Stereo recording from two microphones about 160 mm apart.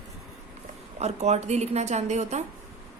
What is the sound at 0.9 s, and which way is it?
A woman's voice, 45° right (ahead or behind).